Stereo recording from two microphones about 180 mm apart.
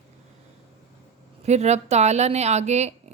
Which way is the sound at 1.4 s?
40° right (ahead or behind).